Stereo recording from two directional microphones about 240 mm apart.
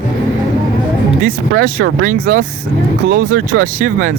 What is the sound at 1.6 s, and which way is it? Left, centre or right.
Speech, right.